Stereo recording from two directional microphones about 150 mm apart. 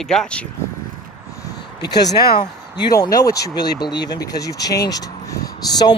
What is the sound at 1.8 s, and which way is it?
Speech, 90° left.